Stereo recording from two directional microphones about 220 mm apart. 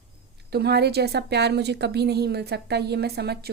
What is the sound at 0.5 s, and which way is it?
A woman's voice, 45° right (ahead or behind).